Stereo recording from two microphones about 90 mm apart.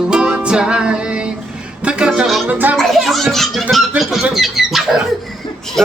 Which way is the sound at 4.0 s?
Centre (ahead or behind).